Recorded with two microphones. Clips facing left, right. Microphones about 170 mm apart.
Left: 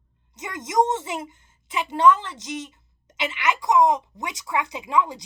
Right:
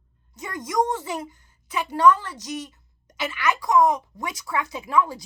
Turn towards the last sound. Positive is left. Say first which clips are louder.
# even
turn(degrees=20)  # may be behind; listen again after turning